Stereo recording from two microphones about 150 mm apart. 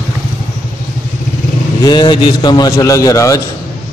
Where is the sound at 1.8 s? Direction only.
30° left (ahead or behind).